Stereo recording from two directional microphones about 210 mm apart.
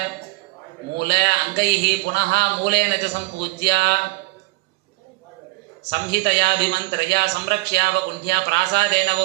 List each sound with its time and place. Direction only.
0.9 s a man's voice: 50° right (ahead or behind)
5.8 s a man's voice: 50° right (ahead or behind)